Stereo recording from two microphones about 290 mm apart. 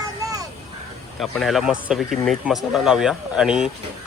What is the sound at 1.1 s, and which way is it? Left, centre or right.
Speech, centre.